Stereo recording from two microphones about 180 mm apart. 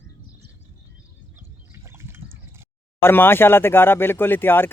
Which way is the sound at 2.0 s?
15° right (ahead or behind).